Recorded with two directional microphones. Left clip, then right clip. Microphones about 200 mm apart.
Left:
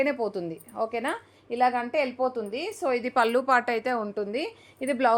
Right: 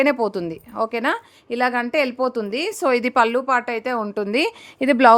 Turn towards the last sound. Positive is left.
turn(degrees=-50)  # may be behind; listen again after turning